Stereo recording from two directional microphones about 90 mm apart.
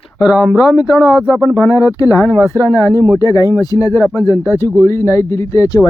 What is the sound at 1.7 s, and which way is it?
Speech, 40° left (ahead or behind).